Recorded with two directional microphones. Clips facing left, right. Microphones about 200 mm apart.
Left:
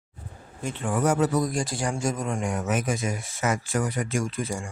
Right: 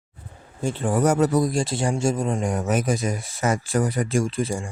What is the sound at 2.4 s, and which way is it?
Speech, 35° right (ahead or behind).